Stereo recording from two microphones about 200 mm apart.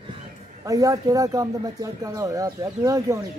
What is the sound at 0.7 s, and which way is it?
Speech, 15° right (ahead or behind).